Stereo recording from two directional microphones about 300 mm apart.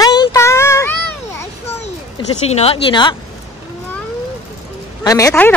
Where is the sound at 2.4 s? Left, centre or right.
Centre.